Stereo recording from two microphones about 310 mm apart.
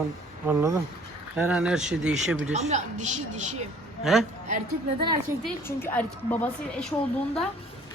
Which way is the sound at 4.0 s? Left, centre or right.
Centre.